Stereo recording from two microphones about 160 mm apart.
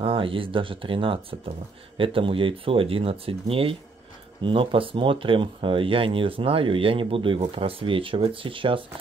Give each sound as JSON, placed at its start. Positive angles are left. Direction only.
{"t": 0.0, "sound": "speech", "side_deg": -35}